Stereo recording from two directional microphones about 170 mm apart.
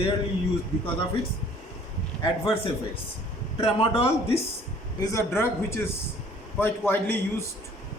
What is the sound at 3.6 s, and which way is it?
Speech, 35° left (ahead or behind).